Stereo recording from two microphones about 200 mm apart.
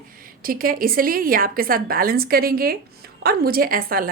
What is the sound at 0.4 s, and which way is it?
A woman's voice, 45° right (ahead or behind).